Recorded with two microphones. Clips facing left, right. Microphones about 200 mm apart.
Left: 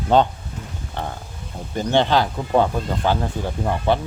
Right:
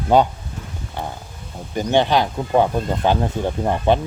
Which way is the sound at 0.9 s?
10° right (ahead or behind).